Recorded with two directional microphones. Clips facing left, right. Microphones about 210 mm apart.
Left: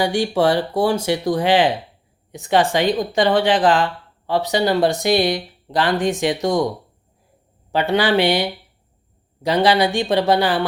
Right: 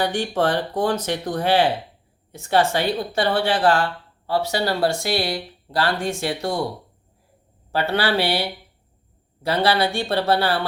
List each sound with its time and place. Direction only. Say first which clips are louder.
0.0 s a woman's voice: left 4 dB; 15° left (ahead or behind)
7.7 s a woman's voice: left 4 dB; 15° left (ahead or behind)